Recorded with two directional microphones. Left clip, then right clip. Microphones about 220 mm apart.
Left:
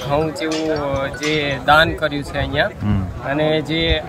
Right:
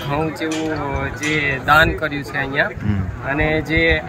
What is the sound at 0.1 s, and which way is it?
Speech, 15° left (ahead or behind).